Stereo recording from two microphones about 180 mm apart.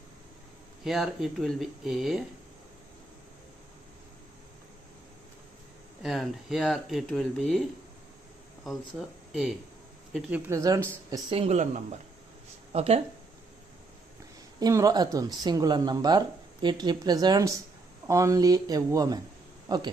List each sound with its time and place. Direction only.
0.9 s speech: centre (ahead or behind)
6.0 s speech: centre (ahead or behind)
8.6 s speech: centre (ahead or behind)
10.5 s speech: 15° right (ahead or behind)
11.1 s speech: 30° right (ahead or behind)
14.6 s speech: 20° right (ahead or behind)